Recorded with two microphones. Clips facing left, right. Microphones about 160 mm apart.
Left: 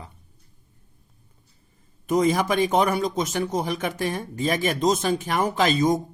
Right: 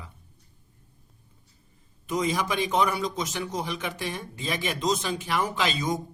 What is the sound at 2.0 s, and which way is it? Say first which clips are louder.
A man's voice: left 6 dB; 50° left (ahead or behind).